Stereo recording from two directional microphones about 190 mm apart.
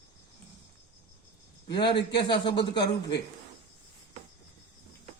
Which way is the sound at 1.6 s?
25° left (ahead or behind).